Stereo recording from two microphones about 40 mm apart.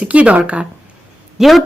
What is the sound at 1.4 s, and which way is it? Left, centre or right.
Speech, centre.